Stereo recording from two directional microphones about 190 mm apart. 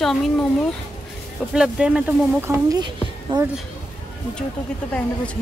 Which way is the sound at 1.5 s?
5° right (ahead or behind).